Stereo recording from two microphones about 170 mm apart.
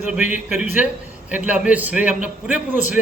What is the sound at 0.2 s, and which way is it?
Speech, 45° left (ahead or behind).